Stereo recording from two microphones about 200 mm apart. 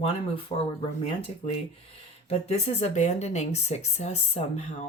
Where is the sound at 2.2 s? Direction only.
30° left (ahead or behind).